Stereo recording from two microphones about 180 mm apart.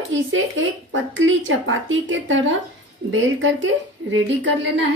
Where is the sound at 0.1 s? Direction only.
90° right.